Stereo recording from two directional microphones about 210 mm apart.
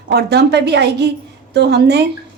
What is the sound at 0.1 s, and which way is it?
A woman's voice, 50° right (ahead or behind).